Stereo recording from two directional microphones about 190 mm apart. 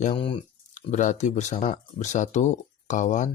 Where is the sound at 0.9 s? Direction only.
40° left (ahead or behind).